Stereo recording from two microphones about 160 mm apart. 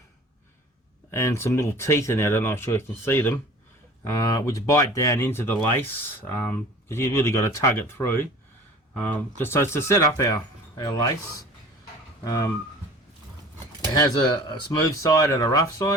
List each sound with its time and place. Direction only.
1.1 s speech: 20° left (ahead or behind)
9.4 s speech: 15° left (ahead or behind)
12.2 s speech: 20° left (ahead or behind)
13.9 s speech: 25° left (ahead or behind)